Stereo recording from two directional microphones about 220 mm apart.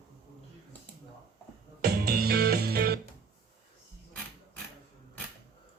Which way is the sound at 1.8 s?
45° right (ahead or behind).